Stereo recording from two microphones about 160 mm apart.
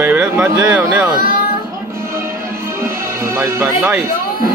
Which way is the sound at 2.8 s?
15° right (ahead or behind).